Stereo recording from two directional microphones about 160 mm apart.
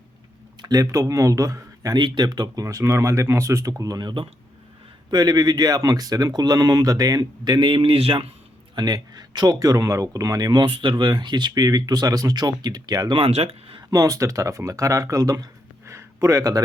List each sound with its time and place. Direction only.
0.6 s speech: 20° right (ahead or behind)
8.7 s speech: 25° right (ahead or behind)
13.9 s speech: 20° right (ahead or behind)
15.9 s a sound: 20° right (ahead or behind)